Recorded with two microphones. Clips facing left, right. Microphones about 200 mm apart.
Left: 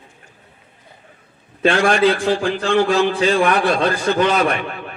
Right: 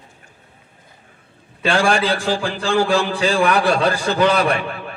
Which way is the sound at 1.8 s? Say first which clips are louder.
Left 2 dB; 35° right (ahead or behind).